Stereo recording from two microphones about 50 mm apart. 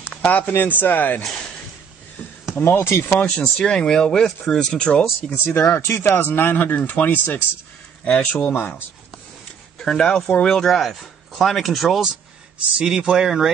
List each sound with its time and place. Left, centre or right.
0.1 s a sound: left
0.5 s speech: left
2.5 s speech: left
3.1 s speech: left
5.3 s speech: left
9.8 s speech: centre
12.7 s speech: centre